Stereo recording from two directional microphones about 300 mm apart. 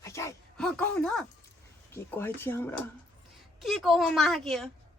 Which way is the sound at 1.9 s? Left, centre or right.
Centre.